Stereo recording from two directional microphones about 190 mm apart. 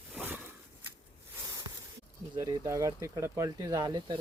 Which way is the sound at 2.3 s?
15° right (ahead or behind).